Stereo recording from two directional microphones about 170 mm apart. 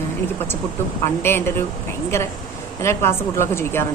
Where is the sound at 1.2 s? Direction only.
15° left (ahead or behind).